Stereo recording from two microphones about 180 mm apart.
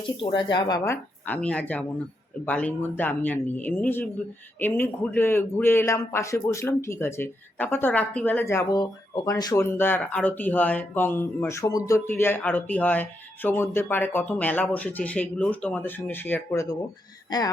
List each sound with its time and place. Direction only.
0.2 s speech: 25° left (ahead or behind)
1.3 s a man's voice: 5° left (ahead or behind)
17.2 s speech: 20° left (ahead or behind)